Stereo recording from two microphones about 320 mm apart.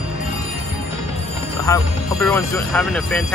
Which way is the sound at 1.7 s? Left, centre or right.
Centre.